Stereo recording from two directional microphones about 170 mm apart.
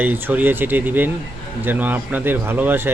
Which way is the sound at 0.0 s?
10° right (ahead or behind).